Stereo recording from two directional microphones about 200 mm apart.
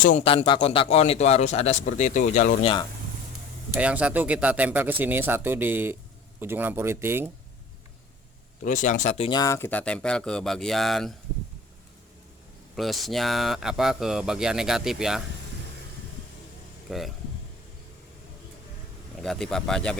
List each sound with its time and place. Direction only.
0.0 s a man's voice: 40° left (ahead or behind)
0.3 s a man's voice: 25° left (ahead or behind)
3.8 s speech: 5° right (ahead or behind)
8.6 s a man's voice: 40° left (ahead or behind)
9.4 s speech: 15° left (ahead or behind)
12.7 s speech: centre (ahead or behind)
16.9 s speech: centre (ahead or behind)
19.2 s speech: 5° left (ahead or behind)